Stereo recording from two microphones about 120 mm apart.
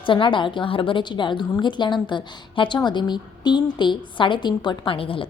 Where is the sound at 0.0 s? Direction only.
45° left (ahead or behind).